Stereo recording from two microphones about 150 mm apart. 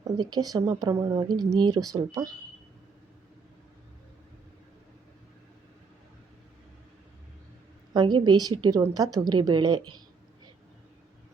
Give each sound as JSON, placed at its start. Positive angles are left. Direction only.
{"t": 0.0, "sound": "a woman's voice", "side_deg": -25}
{"t": 7.9, "sound": "a woman's voice", "side_deg": -30}